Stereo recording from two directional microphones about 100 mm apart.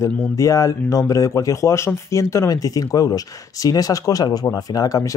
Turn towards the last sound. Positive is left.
turn(degrees=40)  # may be behind; listen again after turning